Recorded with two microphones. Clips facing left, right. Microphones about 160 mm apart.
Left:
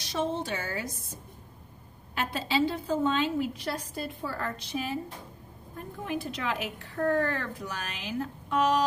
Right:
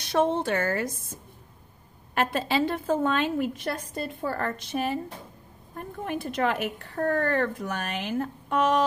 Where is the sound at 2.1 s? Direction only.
55° right (ahead or behind).